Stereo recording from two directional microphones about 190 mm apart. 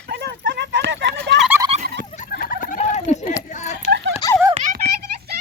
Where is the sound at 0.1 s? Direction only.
60° right (ahead or behind).